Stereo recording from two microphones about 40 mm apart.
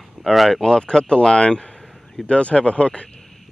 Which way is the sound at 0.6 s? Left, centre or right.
Centre.